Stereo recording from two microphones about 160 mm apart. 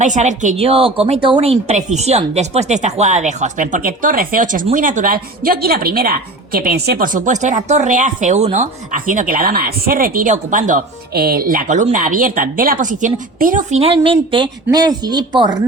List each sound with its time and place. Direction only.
0.0 s a woman's voice: 50° right (ahead or behind)
11.1 s a woman's voice: 75° right (ahead or behind); by 15.4 s 25° right (ahead or behind)